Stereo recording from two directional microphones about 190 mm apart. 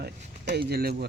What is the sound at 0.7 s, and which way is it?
Speech, 55° right (ahead or behind).